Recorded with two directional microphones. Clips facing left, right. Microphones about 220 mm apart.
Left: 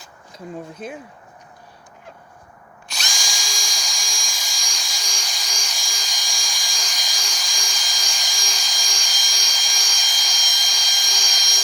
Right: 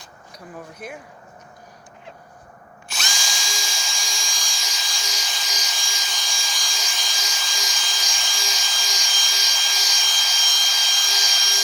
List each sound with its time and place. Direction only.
0.3 s speech: 25° left (ahead or behind)
2.9 s drill: centre (ahead or behind)